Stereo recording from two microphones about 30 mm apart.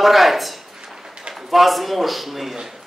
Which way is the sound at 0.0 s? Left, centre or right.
Centre.